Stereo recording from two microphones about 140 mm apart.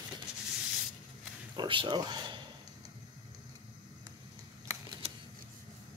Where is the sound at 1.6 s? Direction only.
35° right (ahead or behind).